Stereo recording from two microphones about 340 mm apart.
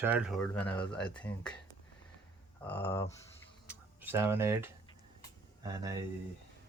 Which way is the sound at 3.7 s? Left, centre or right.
Centre.